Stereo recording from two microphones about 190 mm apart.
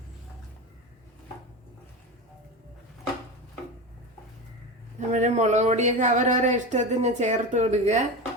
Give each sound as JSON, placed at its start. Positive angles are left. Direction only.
{"t": 4.9, "sound": "speech", "side_deg": -40}